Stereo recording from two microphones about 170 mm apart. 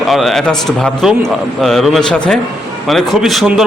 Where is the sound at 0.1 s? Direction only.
Centre (ahead or behind).